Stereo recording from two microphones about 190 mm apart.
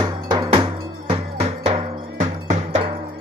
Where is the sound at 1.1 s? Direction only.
30° right (ahead or behind).